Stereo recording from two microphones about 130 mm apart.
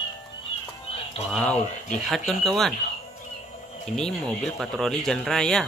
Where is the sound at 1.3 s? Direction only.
5° left (ahead or behind).